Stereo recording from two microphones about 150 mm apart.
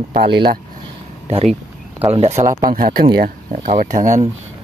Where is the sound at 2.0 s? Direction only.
45° right (ahead or behind).